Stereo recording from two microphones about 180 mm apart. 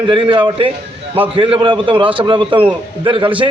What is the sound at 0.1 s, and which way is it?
A man's voice, 30° right (ahead or behind).